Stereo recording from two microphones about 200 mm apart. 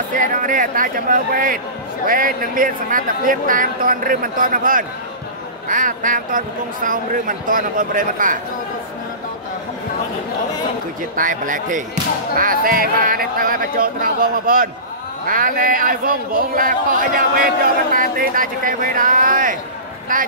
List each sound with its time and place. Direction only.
0.1 s speech: 40° right (ahead or behind)
11.1 s speech: 40° right (ahead or behind)